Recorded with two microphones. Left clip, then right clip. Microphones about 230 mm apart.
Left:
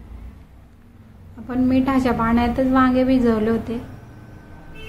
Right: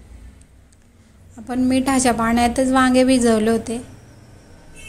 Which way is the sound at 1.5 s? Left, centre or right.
Right.